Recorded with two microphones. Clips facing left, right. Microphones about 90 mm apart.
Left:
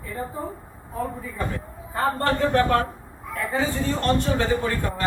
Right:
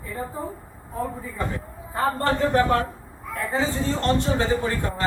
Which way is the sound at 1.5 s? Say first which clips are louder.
Even; 20° right (ahead or behind).